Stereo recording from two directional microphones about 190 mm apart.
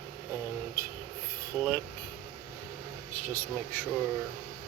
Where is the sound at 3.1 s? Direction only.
10° left (ahead or behind).